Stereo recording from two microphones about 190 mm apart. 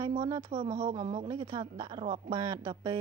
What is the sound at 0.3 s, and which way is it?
A woman's voice, 25° right (ahead or behind).